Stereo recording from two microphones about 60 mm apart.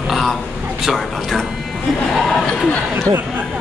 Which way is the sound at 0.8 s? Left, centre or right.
Centre.